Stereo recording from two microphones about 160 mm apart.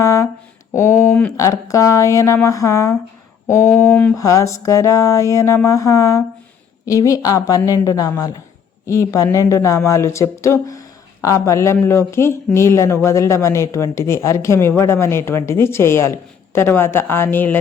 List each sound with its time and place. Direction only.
0.0 s a sound: 20° left (ahead or behind)
1.4 s speech: 20° left (ahead or behind)
3.9 s speech: 5° left (ahead or behind)
4.2 s speech: 20° left (ahead or behind)